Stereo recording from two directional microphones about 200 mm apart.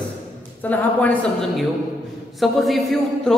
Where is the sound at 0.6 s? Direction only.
10° left (ahead or behind).